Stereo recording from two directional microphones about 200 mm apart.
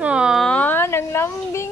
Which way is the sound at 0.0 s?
5° right (ahead or behind).